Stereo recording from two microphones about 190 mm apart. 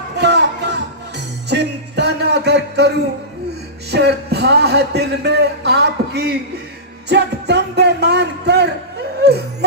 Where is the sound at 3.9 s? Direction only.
60° right (ahead or behind).